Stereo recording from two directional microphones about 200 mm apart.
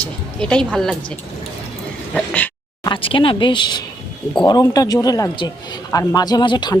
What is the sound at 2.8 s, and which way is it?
A man's voice, 25° left (ahead or behind).